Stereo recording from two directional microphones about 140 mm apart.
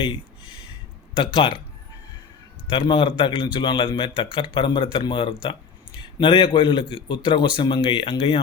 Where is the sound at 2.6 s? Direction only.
35° left (ahead or behind).